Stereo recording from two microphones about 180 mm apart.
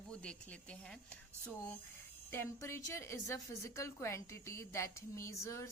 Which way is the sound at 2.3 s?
15° left (ahead or behind).